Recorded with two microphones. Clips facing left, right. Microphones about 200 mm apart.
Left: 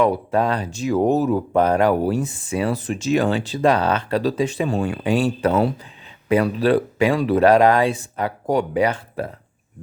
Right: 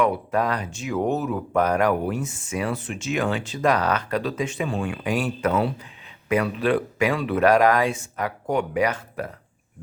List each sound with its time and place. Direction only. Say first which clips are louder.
0.0 s speech: left 4 dB; 30° left (ahead or behind)